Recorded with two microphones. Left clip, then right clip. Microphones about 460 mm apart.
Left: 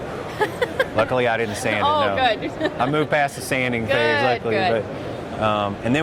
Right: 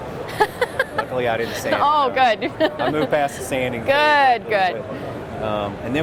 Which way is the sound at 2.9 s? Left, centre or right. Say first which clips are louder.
Even; left.